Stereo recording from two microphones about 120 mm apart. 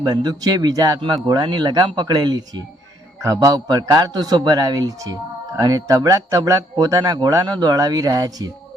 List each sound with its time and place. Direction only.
0.0 s speech: 35° right (ahead or behind)